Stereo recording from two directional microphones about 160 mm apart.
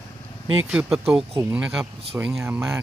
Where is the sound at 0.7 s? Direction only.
5° right (ahead or behind).